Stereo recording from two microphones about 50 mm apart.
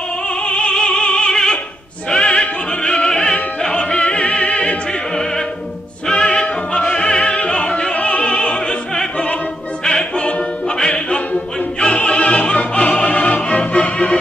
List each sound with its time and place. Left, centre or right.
0.3 s opera: centre
6.0 s music: centre
11.8 s opera: centre